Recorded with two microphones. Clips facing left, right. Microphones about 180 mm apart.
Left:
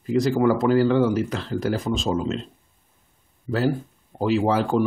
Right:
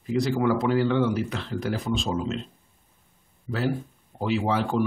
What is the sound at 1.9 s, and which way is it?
Speech, centre (ahead or behind).